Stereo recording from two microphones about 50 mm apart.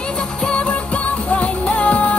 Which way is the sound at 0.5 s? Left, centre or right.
Left.